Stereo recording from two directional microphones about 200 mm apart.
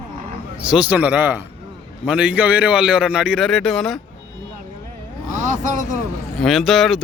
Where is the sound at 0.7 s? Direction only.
5° right (ahead or behind).